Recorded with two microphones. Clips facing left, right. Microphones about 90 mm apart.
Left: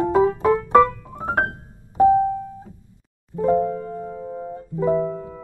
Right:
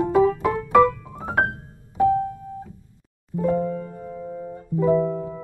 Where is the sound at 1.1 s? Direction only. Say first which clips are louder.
Left 1 dB; 45° left (ahead or behind).